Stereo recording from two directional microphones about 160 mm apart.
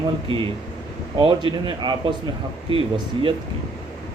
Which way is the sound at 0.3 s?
35° right (ahead or behind).